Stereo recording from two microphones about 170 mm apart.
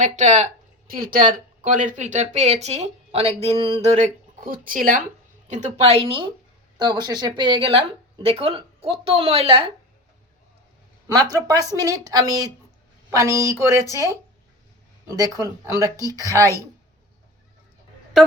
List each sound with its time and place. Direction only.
0.0 s speech: 45° right (ahead or behind)
0.9 s speech: 60° right (ahead or behind); by 4.4 s 40° right (ahead or behind)
4.4 s speech: 55° right (ahead or behind); by 9.7 s 35° right (ahead or behind)
11.1 s speech: 20° right (ahead or behind)